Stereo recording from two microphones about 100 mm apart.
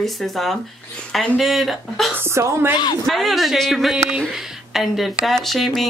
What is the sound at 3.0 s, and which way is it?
Speech, centre (ahead or behind).